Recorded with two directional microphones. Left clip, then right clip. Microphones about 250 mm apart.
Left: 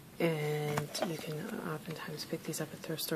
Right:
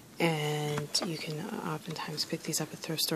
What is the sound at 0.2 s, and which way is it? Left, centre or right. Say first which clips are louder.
Speech: right 3 dB; right.